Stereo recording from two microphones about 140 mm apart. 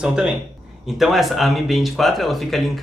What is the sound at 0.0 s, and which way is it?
Speech, 5° right (ahead or behind).